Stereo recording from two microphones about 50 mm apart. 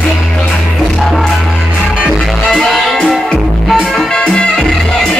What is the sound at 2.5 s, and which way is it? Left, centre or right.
Music, centre.